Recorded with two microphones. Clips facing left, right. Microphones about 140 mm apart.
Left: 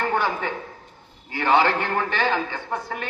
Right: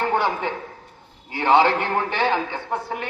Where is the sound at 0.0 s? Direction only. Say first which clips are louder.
Right 2 dB; 20° right (ahead or behind).